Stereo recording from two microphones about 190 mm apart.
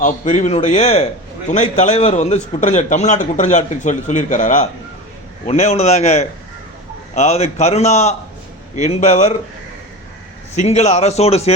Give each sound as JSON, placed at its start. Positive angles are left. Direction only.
{"t": 0.0, "sound": "a man's voice", "side_deg": 40}
{"t": 10.5, "sound": "a man's voice", "side_deg": 35}